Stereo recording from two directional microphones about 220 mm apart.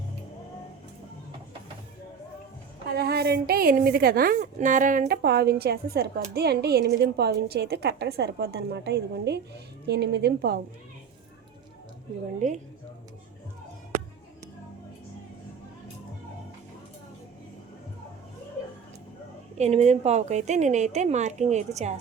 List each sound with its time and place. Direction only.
2.9 s a woman's voice: 45° right (ahead or behind)
19.5 s a woman's voice: 30° right (ahead or behind)